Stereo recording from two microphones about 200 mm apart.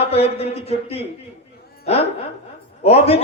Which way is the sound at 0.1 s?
30° left (ahead or behind).